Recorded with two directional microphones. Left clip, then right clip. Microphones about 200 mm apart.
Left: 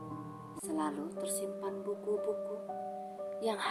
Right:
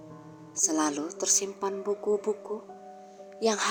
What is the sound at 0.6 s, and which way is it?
Speech, 35° right (ahead or behind).